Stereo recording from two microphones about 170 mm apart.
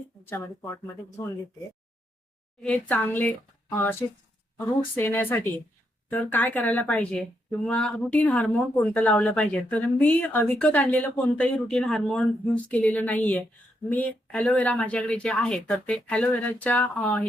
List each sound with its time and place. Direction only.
0.3 s a woman's voice: 15° left (ahead or behind)
2.6 s a woman's voice: 10° left (ahead or behind)